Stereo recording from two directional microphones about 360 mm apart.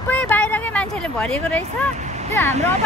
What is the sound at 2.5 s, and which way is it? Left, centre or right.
Speech, centre.